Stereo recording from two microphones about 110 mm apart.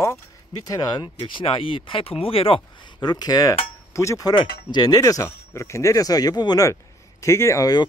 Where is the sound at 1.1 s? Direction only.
50° left (ahead or behind).